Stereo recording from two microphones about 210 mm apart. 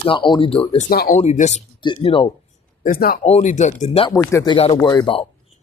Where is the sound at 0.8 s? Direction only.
45° left (ahead or behind).